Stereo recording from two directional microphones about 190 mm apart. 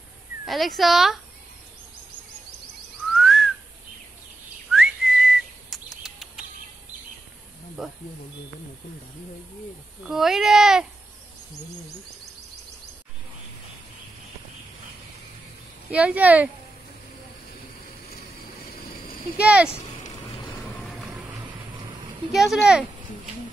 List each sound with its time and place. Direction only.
0.5 s speech: centre (ahead or behind)
3.1 s whistling: centre (ahead or behind)
4.6 s bird: centre (ahead or behind)
7.8 s speech: centre (ahead or behind)
10.0 s speech: centre (ahead or behind)
15.9 s speech: 5° right (ahead or behind)
19.0 s a sound: 50° left (ahead or behind)
19.4 s speech: 5° right (ahead or behind)
22.3 s speech: centre (ahead or behind)